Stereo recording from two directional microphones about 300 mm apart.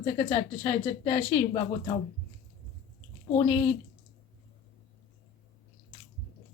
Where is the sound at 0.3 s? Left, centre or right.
Left.